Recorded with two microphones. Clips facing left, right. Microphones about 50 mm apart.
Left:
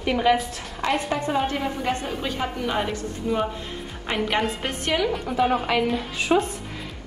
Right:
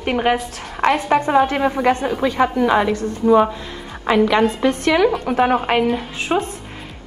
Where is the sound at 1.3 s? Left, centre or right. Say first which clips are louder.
Right 7 dB; right.